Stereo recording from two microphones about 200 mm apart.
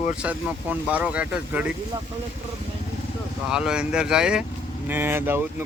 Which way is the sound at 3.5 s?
5° right (ahead or behind).